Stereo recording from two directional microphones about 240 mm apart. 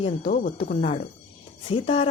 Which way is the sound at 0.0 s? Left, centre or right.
Left.